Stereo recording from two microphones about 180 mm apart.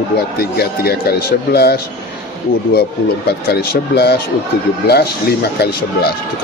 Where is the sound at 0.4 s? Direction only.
60° left (ahead or behind).